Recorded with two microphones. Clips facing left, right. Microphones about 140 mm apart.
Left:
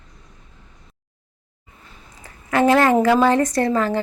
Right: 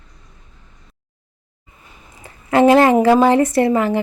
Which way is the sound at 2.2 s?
20° right (ahead or behind).